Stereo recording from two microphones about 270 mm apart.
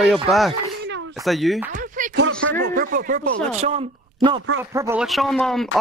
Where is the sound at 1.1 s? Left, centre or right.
Centre.